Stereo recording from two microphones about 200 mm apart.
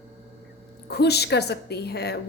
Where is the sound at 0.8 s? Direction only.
55° left (ahead or behind).